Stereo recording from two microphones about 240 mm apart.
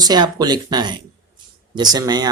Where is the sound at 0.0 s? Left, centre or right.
Centre.